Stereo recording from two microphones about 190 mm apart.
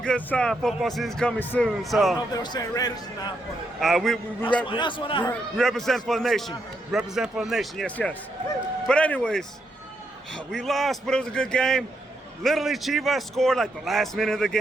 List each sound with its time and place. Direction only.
0.0 s a man's voice: 5° left (ahead or behind)
2.3 s speech: 20° left (ahead or behind)
3.8 s a man's voice: centre (ahead or behind)
4.6 s speech: 25° left (ahead or behind)
5.3 s a man's voice: centre (ahead or behind)